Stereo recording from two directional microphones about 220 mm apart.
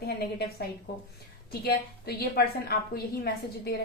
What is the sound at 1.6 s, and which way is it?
Speech, 45° left (ahead or behind).